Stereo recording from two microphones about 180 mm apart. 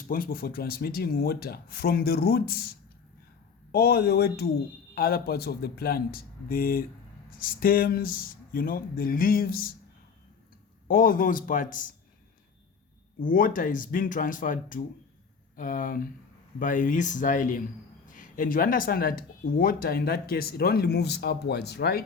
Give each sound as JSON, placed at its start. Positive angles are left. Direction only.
{"t": 0.1, "sound": "speech", "side_deg": 55}
{"t": 10.8, "sound": "speech", "side_deg": 50}
{"t": 13.1, "sound": "speech", "side_deg": 50}